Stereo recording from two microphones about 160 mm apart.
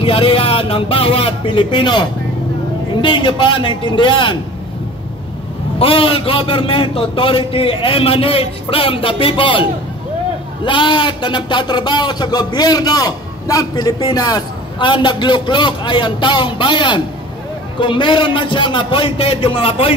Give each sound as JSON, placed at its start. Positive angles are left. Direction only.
{"t": 0.0, "sound": "a man's voice", "side_deg": 35}
{"t": 5.8, "sound": "a man's voice", "side_deg": 35}